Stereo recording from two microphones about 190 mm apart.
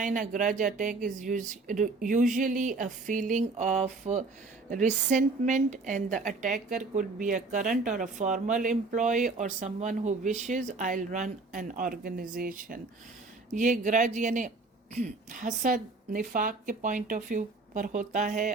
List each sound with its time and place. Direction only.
0.0 s a woman's voice: 45° right (ahead or behind)